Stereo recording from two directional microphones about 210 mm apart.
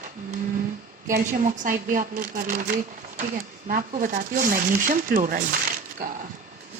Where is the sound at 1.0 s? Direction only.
40° right (ahead or behind).